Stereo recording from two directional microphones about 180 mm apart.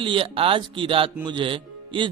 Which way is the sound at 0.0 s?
30° right (ahead or behind).